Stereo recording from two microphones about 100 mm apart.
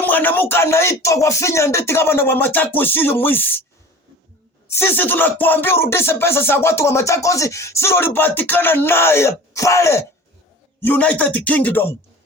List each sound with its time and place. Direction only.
0.0 s speech: 15° left (ahead or behind)
4.7 s speech: 20° left (ahead or behind)
10.8 s speech: 20° left (ahead or behind)